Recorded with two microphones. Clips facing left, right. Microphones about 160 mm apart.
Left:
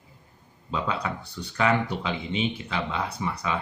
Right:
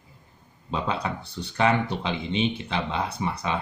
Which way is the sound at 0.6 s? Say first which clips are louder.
Right 1 dB; 25° right (ahead or behind).